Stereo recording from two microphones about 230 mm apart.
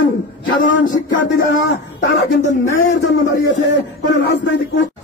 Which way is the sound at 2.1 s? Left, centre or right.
Left.